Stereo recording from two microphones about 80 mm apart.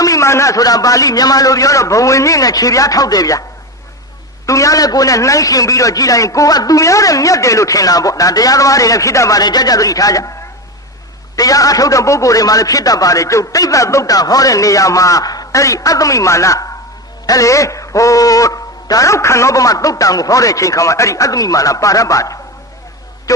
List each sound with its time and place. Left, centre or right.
0.0 s a man's voice: left
4.4 s a man's voice: left
9.4 s a man's voice: left
11.3 s a man's voice: left